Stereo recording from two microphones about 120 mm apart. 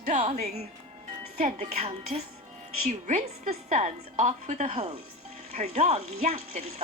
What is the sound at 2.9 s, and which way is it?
A woman's voice, 90° right.